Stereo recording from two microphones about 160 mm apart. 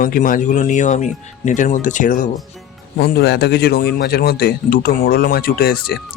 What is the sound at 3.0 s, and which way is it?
A man's voice, 80° left.